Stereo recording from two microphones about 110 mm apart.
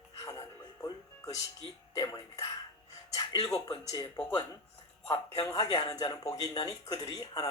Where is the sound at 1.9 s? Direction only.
35° left (ahead or behind).